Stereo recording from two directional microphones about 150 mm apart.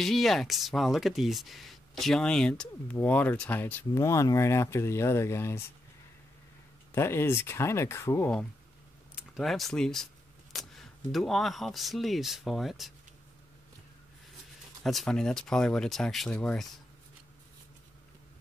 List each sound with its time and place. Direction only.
0.0 s speech: centre (ahead or behind); by 5.6 s 15° left (ahead or behind)
6.9 s speech: 15° left (ahead or behind)
9.1 s speech: centre (ahead or behind)
14.8 s speech: centre (ahead or behind)